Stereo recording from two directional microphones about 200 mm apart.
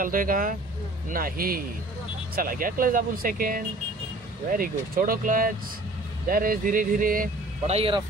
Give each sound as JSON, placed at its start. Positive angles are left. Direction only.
{"t": 0.0, "sound": "speech", "side_deg": -45}
{"t": 7.7, "sound": "speech", "side_deg": -25}